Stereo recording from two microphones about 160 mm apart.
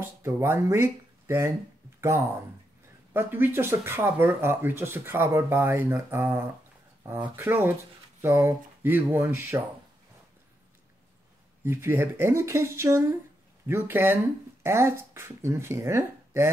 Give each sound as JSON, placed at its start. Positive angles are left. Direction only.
{"t": 0.0, "sound": "speech", "side_deg": -15}
{"t": 2.0, "sound": "a sound", "side_deg": -15}
{"t": 3.1, "sound": "speech", "side_deg": -15}
{"t": 11.6, "sound": "speech", "side_deg": -15}